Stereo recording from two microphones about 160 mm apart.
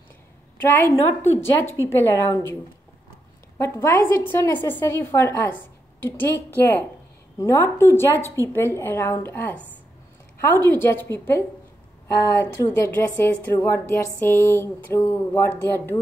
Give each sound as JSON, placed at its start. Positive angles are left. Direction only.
{"t": 0.6, "sound": "a woman's voice", "side_deg": 15}
{"t": 3.5, "sound": "a woman's voice", "side_deg": 20}